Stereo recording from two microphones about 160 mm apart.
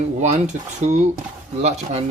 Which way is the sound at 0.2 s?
45° right (ahead or behind).